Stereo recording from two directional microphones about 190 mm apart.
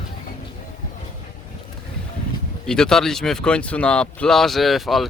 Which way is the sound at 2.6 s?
5° left (ahead or behind).